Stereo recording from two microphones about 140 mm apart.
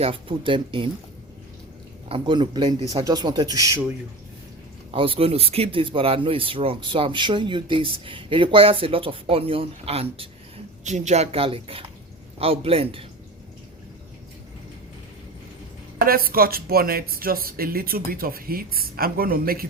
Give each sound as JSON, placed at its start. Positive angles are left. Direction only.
{"t": 0.0, "sound": "speech", "side_deg": -40}
{"t": 2.0, "sound": "speech", "side_deg": -35}
{"t": 4.9, "sound": "speech", "side_deg": -40}
{"t": 10.8, "sound": "a woman's voice", "side_deg": -55}
{"t": 16.0, "sound": "speech", "side_deg": -90}